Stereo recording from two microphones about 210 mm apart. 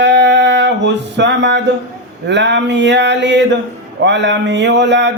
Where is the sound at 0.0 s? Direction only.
55° right (ahead or behind).